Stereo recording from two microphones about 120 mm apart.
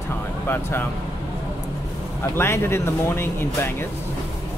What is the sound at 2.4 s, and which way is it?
Speech, 20° left (ahead or behind).